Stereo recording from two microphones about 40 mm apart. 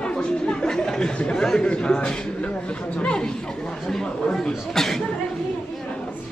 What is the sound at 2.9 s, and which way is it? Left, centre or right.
Chatter, left.